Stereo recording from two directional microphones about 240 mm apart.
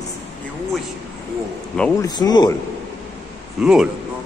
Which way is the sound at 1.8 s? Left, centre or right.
Centre.